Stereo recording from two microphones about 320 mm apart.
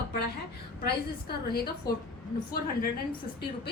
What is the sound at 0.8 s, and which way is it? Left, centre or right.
Speech, left.